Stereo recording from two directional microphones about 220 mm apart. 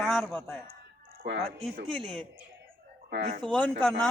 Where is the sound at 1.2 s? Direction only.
55° right (ahead or behind).